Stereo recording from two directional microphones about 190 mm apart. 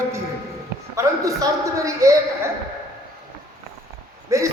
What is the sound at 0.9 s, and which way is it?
A man's voice, 15° right (ahead or behind).